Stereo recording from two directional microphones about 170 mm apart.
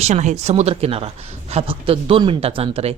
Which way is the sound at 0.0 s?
45° right (ahead or behind).